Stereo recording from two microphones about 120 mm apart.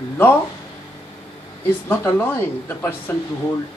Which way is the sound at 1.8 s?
20° left (ahead or behind).